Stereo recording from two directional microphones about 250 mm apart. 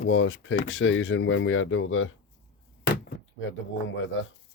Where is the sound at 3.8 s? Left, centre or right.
Left.